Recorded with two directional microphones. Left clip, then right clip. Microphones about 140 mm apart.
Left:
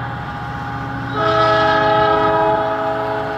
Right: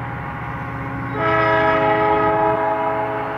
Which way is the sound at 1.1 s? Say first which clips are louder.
Left 3 dB; 20° left (ahead or behind).